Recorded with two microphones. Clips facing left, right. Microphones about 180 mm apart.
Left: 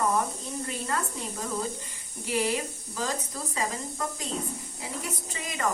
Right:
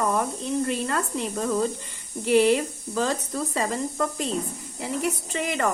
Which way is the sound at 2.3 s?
65° right (ahead or behind).